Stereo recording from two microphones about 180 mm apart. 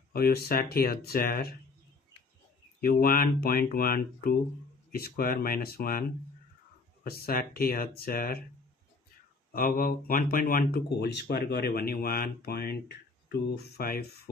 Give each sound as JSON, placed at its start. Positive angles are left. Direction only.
{"t": 0.1, "sound": "speech", "side_deg": 60}
{"t": 2.8, "sound": "speech", "side_deg": 55}
{"t": 9.5, "sound": "speech", "side_deg": 55}